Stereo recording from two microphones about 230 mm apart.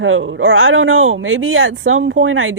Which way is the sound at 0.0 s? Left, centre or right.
Right.